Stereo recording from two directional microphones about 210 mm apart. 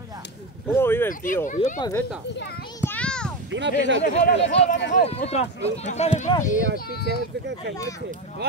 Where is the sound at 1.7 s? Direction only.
15° left (ahead or behind).